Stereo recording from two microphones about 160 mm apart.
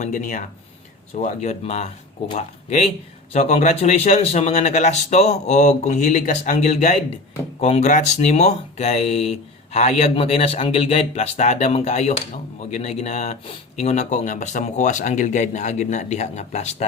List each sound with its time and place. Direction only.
0.0 s speech: 50° left (ahead or behind)